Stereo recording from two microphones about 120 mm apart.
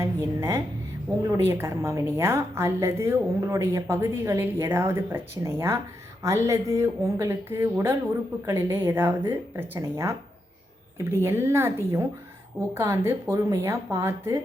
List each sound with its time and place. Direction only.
0.0 s a woman's voice: 25° right (ahead or behind)